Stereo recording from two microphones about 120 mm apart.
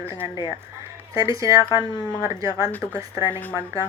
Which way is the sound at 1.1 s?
30° right (ahead or behind).